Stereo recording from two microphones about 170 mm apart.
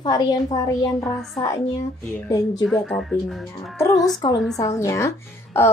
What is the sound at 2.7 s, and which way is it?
Speech, 5° left (ahead or behind).